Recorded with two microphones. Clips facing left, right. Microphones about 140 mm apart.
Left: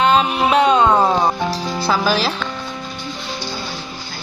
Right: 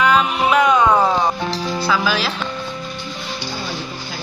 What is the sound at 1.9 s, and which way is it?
Speech, 40° left (ahead or behind).